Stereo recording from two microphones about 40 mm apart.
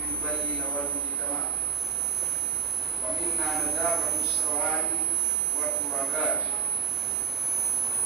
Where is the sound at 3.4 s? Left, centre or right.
Centre.